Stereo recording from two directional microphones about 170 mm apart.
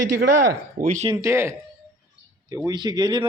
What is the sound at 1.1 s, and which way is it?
Speech, 15° right (ahead or behind).